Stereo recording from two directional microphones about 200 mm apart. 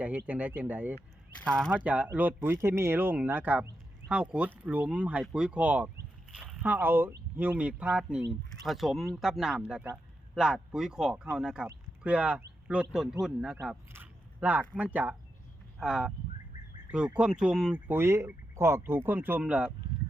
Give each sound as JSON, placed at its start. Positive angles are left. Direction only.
{"t": 0.3, "sound": "speech", "side_deg": -10}
{"t": 1.5, "sound": "speech", "side_deg": 5}
{"t": 1.7, "sound": "speech", "side_deg": -5}